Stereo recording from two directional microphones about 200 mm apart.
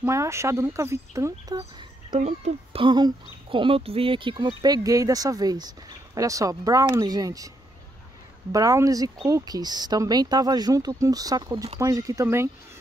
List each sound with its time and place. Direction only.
0.0 s speech: 15° right (ahead or behind)
2.1 s speech: 35° right (ahead or behind); by 12.4 s 15° right (ahead or behind)